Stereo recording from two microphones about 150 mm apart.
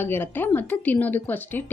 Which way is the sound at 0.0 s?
15° left (ahead or behind).